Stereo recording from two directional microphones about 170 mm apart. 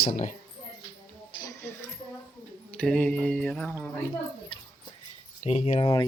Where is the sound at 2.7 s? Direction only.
5° left (ahead or behind).